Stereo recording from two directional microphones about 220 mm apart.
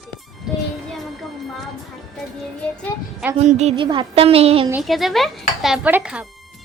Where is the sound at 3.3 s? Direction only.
30° right (ahead or behind).